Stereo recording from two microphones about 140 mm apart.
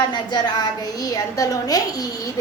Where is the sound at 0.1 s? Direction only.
30° left (ahead or behind).